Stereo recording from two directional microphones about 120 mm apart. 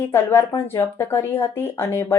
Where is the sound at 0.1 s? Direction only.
20° left (ahead or behind).